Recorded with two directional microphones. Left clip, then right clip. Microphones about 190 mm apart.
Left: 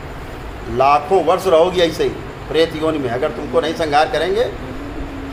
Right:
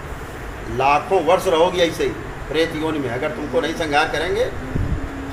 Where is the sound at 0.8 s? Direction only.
45° left (ahead or behind).